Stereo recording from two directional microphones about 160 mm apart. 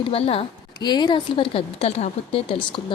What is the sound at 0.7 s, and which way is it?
Speech, 25° left (ahead or behind).